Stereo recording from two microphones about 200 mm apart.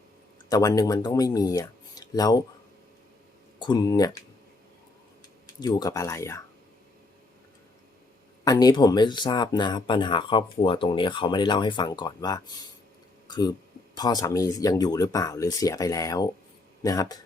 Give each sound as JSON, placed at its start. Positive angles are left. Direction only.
{"t": 0.5, "sound": "speech", "side_deg": 20}
{"t": 3.6, "sound": "speech", "side_deg": 20}
{"t": 5.5, "sound": "speech", "side_deg": 20}
{"t": 8.4, "sound": "speech", "side_deg": 20}
{"t": 13.2, "sound": "a sound", "side_deg": 20}
{"t": 13.9, "sound": "speech", "side_deg": 20}